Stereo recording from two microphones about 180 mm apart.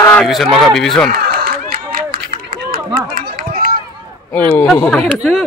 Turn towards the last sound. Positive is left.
turn(degrees=-5)  # may be behind; listen again after turning